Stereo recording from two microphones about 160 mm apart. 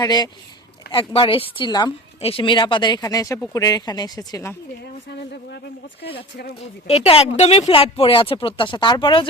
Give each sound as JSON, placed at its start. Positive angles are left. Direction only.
{"t": 0.0, "sound": "speech", "side_deg": 25}
{"t": 6.8, "sound": "speech", "side_deg": 40}